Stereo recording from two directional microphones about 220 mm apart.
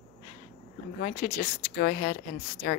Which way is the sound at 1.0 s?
40° left (ahead or behind).